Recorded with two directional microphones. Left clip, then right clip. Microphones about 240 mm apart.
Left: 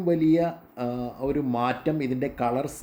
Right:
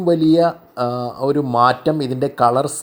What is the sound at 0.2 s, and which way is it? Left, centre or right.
Speech, centre.